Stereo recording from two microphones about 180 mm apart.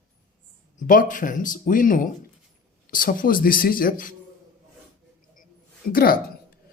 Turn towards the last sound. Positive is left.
turn(degrees=55)  # may be behind; listen again after turning